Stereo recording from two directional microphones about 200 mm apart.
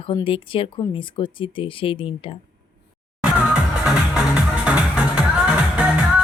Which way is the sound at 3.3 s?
5° right (ahead or behind).